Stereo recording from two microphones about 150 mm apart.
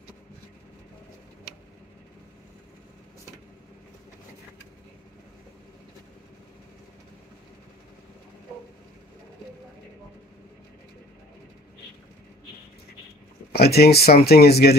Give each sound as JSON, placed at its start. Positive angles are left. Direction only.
{"t": 13.5, "sound": "speech", "side_deg": 90}